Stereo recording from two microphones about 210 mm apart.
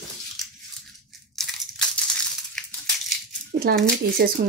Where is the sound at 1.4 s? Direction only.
Centre (ahead or behind).